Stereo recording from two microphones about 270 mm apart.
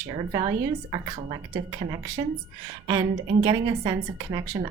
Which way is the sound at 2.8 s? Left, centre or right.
Centre.